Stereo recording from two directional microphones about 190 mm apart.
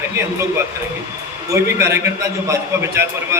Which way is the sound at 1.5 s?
15° right (ahead or behind).